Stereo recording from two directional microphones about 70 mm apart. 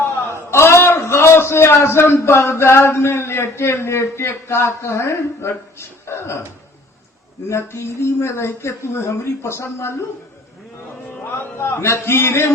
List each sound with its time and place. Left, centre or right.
0.5 s a man's voice: left
7.5 s speech: left
11.2 s speech: left